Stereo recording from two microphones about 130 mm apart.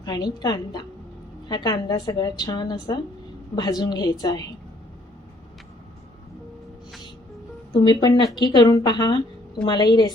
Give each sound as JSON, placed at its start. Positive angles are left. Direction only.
{"t": 0.0, "sound": "a woman's voice", "side_deg": 30}
{"t": 7.9, "sound": "a woman's voice", "side_deg": 35}